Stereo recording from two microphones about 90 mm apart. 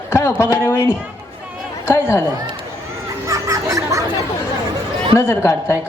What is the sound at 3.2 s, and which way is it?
Chatter, 40° right (ahead or behind).